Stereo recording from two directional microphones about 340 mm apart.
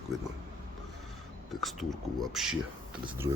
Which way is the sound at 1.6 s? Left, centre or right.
Centre.